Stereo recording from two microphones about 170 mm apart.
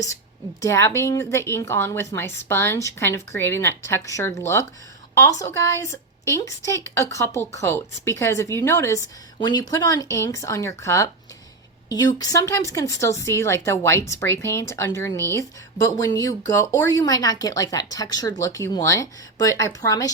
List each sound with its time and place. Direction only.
0.6 s a woman's voice: 15° left (ahead or behind)